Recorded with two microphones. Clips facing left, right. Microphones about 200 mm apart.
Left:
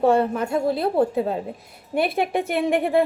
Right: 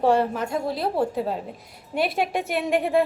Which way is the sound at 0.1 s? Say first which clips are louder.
Left 2 dB; 55° left (ahead or behind).